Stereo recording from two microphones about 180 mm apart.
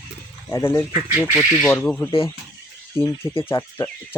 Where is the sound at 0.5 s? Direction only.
15° left (ahead or behind).